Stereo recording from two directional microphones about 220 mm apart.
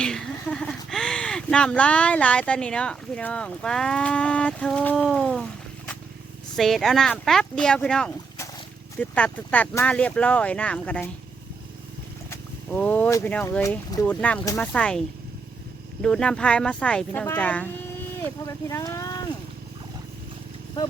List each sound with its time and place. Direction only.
0.0 s speech: 5° left (ahead or behind)
12.3 s speech: 5° left (ahead or behind)